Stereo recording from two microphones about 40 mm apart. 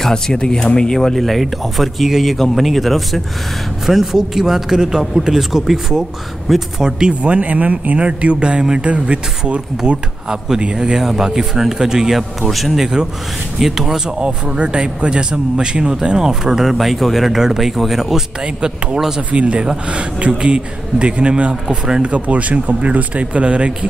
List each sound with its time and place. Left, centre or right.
0.1 s speech: centre
0.9 s speech: centre
6.8 s a man's voice: centre
7.2 s a man's voice: right; by 12.8 s centre
12.8 s speech: centre
14.0 s a man's voice: right
16.7 s speech: centre
18.4 s a man's voice: right
18.9 s speech: centre
19.3 s a man's voice: right